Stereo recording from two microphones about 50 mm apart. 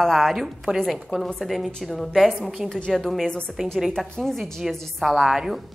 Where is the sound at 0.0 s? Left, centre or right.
Centre.